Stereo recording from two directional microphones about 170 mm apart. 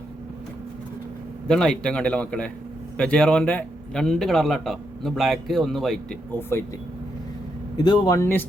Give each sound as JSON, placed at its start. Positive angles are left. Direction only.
{"t": 1.5, "sound": "a man's voice", "side_deg": 5}
{"t": 7.8, "sound": "a man's voice", "side_deg": 25}